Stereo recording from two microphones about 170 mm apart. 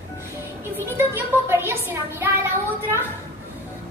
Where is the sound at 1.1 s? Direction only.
15° right (ahead or behind).